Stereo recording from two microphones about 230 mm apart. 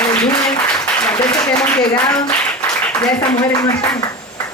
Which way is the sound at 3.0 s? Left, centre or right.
Centre.